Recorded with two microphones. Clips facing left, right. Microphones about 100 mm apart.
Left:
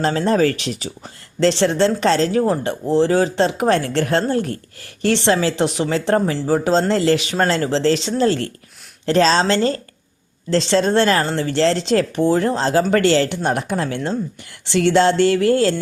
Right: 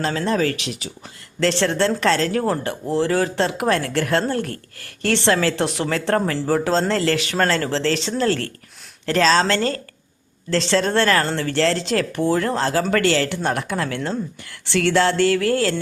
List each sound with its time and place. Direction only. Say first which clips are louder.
0.0 s speech: left 4 dB; 35° left (ahead or behind)
1.4 s a woman's voice: left 3 dB; 20° left (ahead or behind)